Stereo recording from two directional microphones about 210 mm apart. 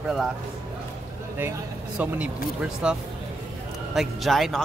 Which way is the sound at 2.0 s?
5° right (ahead or behind).